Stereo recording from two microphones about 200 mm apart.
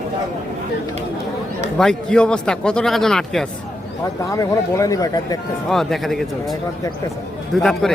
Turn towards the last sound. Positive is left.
turn(degrees=0)  # may be behind; listen again after turning